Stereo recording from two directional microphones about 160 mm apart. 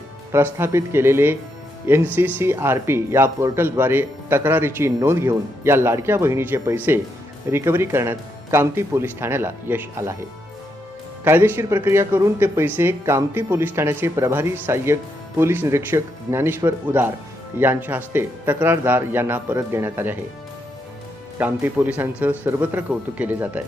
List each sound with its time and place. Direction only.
0.3 s speech: 15° right (ahead or behind)
11.2 s speech: 15° right (ahead or behind)
21.3 s speech: 10° right (ahead or behind)